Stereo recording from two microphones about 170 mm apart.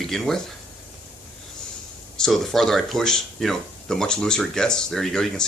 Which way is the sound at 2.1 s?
Centre (ahead or behind).